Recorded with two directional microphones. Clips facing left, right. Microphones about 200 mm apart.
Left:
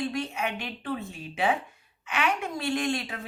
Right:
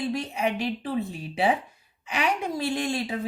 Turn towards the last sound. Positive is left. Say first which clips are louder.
# right 1 dB
turn(degrees=-35)  # may be behind; listen again after turning